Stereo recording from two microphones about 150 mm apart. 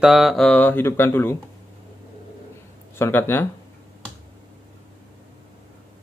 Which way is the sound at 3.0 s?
15° left (ahead or behind).